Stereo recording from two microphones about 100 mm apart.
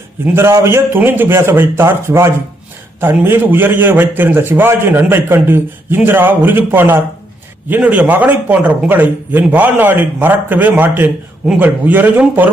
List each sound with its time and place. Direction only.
0.3 s a man's voice: 25° right (ahead or behind)